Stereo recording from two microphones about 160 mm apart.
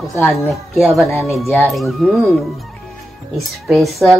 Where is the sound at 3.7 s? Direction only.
Centre (ahead or behind).